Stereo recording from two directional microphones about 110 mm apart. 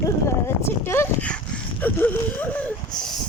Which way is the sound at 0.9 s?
20° left (ahead or behind).